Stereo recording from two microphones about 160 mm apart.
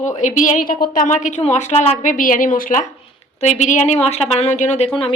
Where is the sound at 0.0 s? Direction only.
50° left (ahead or behind).